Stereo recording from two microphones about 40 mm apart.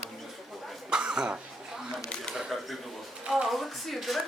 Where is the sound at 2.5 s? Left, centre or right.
Centre.